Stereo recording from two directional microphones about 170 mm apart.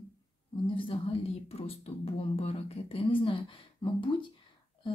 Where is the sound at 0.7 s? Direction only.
35° left (ahead or behind).